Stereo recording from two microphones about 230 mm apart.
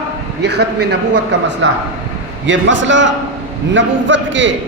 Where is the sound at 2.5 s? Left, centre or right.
Right.